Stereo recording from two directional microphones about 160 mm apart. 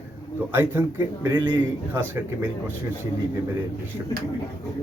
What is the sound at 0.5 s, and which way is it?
Speech, 10° right (ahead or behind).